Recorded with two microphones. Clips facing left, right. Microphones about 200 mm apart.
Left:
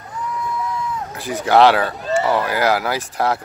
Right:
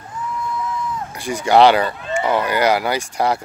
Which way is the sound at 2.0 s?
40° left (ahead or behind).